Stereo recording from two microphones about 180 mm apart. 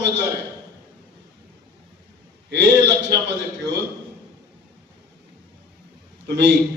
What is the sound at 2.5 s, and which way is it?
A man's voice, 75° right (ahead or behind).